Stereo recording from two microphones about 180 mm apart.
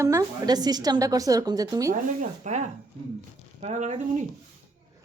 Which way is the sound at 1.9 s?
45° right (ahead or behind).